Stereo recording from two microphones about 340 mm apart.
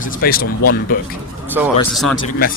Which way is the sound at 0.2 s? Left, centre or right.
Left.